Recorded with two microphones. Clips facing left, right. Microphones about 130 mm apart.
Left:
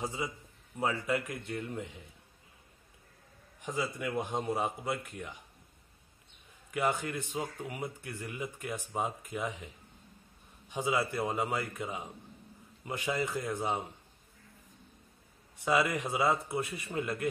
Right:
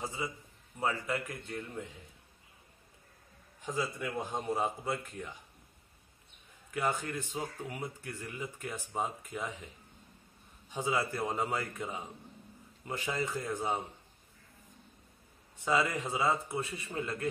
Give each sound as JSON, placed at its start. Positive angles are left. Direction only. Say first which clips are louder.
{"t": 0.0, "sound": "a man's voice", "louder": "left 2 dB", "side_deg": 25}
{"t": 4.0, "sound": "speech", "louder": "left 3 dB", "side_deg": 10}
{"t": 6.7, "sound": "speech", "louder": "left 2 dB", "side_deg": 15}
{"t": 10.7, "sound": "speech", "louder": "left 1 dB", "side_deg": 15}
{"t": 15.6, "sound": "speech", "louder": "left 1 dB", "side_deg": 15}